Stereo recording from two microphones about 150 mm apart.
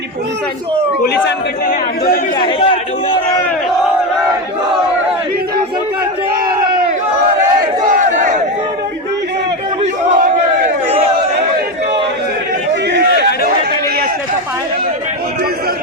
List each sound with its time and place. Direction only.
2.4 s a man's voice: 35° left (ahead or behind)
7.9 s crowd: 60° right (ahead or behind)
9.8 s battle cry: 50° right (ahead or behind)
13.0 s a sound: 90° right